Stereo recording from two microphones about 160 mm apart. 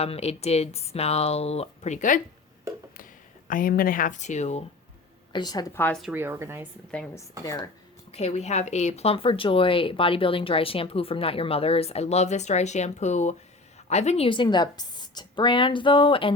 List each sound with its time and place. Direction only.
0.0 s a woman's voice: 40° left (ahead or behind)
3.5 s speech: 60° left (ahead or behind); by 4.6 s 45° left (ahead or behind)
5.3 s a woman's voice: 25° left (ahead or behind)
5.7 s a woman's voice: 10° left (ahead or behind)
6.0 s speech: 10° right (ahead or behind)
7.4 s a woman's voice: 20° left (ahead or behind)
8.1 s a woman's voice: 40° left (ahead or behind)